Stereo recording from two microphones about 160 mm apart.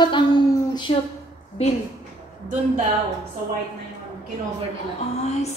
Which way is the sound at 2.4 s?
55° right (ahead or behind).